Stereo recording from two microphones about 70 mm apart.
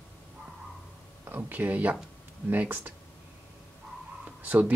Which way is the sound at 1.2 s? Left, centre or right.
Right.